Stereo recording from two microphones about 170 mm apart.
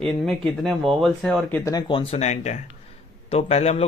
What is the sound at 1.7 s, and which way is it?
Speech, 30° left (ahead or behind).